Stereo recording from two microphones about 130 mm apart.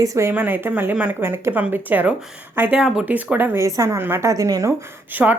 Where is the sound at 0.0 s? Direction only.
25° right (ahead or behind).